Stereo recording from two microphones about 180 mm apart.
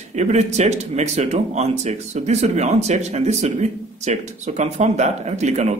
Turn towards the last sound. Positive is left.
turn(degrees=-40)  # may be behind; listen again after turning